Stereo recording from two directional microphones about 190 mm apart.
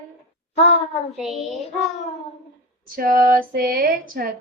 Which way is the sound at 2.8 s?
50° right (ahead or behind).